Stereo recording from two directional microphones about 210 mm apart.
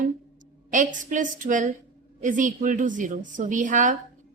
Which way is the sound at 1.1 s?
40° right (ahead or behind).